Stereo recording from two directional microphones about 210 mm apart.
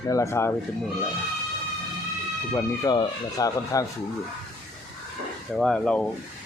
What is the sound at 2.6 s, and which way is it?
Speech, 20° left (ahead or behind).